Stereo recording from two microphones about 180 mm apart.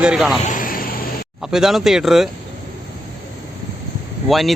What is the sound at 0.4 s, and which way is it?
Vehicle, 50° left (ahead or behind).